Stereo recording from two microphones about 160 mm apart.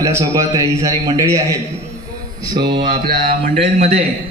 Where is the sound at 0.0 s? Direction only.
20° right (ahead or behind).